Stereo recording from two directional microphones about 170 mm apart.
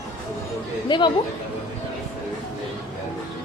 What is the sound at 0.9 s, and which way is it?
Speech, 25° left (ahead or behind).